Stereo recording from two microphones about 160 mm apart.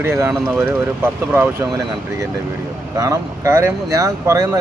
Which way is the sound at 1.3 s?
15° right (ahead or behind).